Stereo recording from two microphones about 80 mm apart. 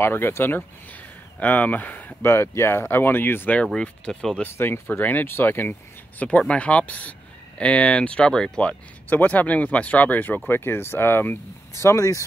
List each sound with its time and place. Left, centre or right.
0.0 s speech: left
2.2 s speech: left
3.6 s speech: centre
4.4 s speech: left